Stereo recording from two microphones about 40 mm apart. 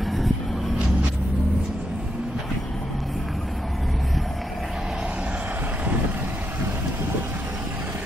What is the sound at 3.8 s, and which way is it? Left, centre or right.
Vehicle, centre.